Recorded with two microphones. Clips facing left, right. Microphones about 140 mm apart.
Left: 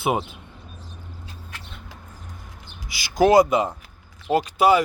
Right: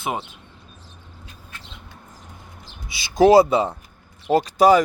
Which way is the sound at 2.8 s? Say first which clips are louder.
Right 3 dB; 25° right (ahead or behind).